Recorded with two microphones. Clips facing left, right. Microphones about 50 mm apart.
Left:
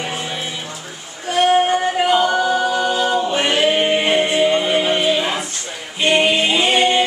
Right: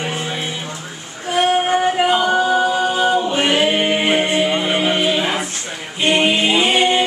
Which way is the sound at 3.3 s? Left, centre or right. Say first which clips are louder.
Even; centre.